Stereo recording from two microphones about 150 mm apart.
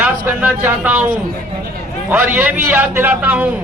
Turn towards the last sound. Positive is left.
turn(degrees=-10)  # may be behind; listen again after turning